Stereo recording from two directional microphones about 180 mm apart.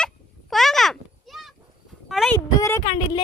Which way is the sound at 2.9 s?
30° left (ahead or behind).